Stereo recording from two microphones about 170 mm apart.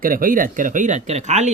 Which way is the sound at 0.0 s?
55° right (ahead or behind).